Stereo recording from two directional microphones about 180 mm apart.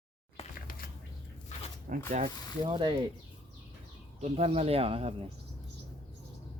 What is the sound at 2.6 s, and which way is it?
Speech, 25° right (ahead or behind).